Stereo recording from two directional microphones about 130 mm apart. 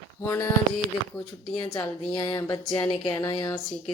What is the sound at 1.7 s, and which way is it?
Speech, 30° left (ahead or behind).